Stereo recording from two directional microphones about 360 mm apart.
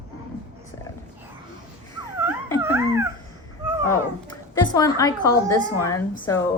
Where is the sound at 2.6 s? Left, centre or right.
Centre.